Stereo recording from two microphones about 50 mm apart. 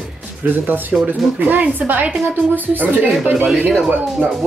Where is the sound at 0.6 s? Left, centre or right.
Right.